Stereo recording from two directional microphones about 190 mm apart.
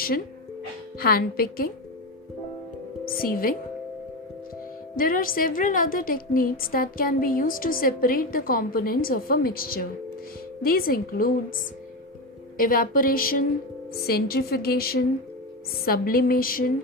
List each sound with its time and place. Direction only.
0.9 s a woman's voice: 55° left (ahead or behind)
3.1 s a woman's voice: 50° left (ahead or behind)
4.9 s a woman's voice: 50° left (ahead or behind)
12.5 s a woman's voice: 45° left (ahead or behind)